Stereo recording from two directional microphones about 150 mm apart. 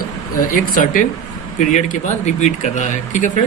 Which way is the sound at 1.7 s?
50° left (ahead or behind).